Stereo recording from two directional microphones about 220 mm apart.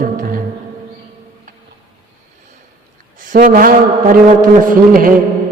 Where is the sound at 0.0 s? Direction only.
40° right (ahead or behind).